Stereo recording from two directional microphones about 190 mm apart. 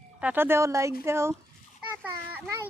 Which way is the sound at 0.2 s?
10° right (ahead or behind).